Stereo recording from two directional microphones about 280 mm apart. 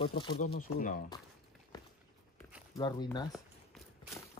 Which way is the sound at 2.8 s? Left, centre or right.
Centre.